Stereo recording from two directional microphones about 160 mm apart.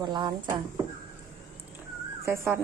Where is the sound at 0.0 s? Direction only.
25° right (ahead or behind).